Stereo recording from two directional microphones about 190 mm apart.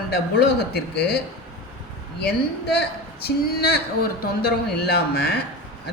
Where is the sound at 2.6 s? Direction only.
55° left (ahead or behind).